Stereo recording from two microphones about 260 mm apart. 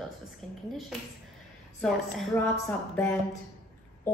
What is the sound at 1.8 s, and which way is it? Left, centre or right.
Speech, centre.